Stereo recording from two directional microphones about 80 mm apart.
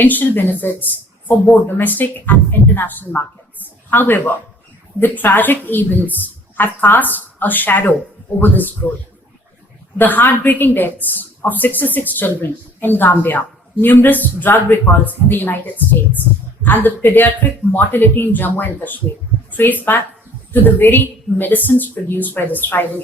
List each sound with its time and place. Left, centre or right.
0.0 s a woman's voice: left
10.0 s a woman's voice: left